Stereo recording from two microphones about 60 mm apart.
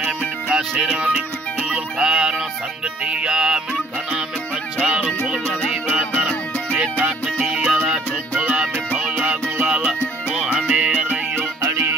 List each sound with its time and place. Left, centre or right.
0.5 s music: centre
4.8 s music: centre
6.7 s music: right
8.5 s music: centre
11.6 s music: right